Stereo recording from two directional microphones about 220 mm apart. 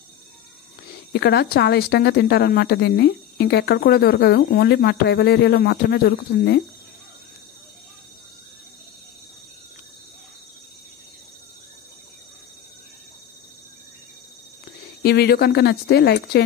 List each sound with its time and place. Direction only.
1.1 s a woman's voice: 50° left (ahead or behind)
15.0 s a woman's voice: 45° left (ahead or behind)